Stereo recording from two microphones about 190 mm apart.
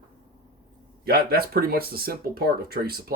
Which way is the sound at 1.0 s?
55° right (ahead or behind).